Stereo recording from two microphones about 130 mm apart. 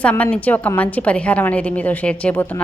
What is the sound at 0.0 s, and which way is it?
A woman's voice, 10° left (ahead or behind).